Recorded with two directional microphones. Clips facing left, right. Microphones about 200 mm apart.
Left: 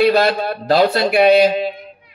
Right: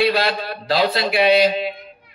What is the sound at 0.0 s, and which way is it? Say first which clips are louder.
A man's voice: left 5 dB; 45° left (ahead or behind).